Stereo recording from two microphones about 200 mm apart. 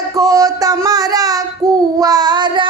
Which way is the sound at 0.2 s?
15° right (ahead or behind).